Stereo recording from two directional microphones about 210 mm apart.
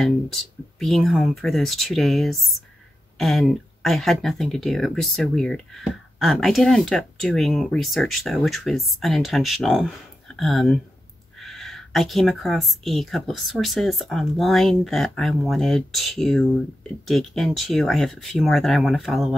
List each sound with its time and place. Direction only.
0.0 s speech: centre (ahead or behind)